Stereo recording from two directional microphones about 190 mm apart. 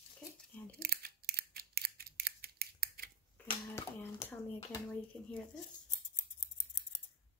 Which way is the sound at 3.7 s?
15° left (ahead or behind).